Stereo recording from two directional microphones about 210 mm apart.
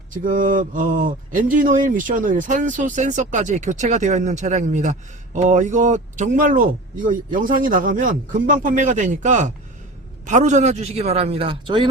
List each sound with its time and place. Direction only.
0.1 s a man's voice: 40° right (ahead or behind); by 11.9 s 20° right (ahead or behind)